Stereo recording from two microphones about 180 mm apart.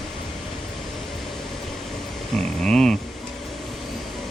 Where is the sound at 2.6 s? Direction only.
5° left (ahead or behind).